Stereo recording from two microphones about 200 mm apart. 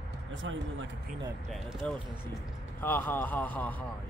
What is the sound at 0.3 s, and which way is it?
Speech, 70° right (ahead or behind).